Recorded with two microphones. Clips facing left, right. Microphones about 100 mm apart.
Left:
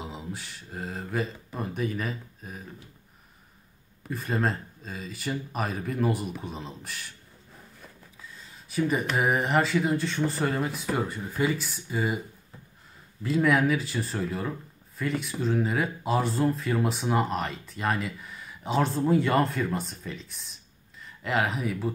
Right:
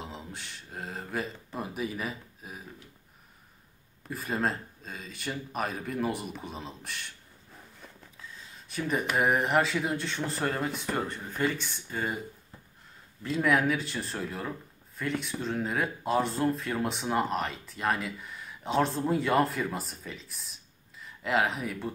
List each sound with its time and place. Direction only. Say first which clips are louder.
0.0 s speech: left 4 dB; 5° left (ahead or behind)
4.1 s speech: left 2 dB; centre (ahead or behind)
13.2 s speech: left 3 dB; centre (ahead or behind)